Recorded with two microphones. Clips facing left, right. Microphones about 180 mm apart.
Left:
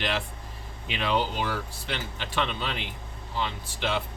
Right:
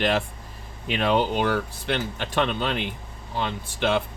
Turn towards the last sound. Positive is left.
turn(degrees=-50)  # may be behind; listen again after turning